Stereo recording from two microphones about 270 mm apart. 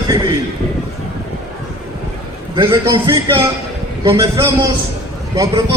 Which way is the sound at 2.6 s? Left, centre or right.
Centre.